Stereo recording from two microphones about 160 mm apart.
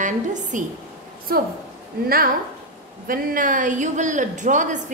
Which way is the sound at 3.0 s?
55° right (ahead or behind).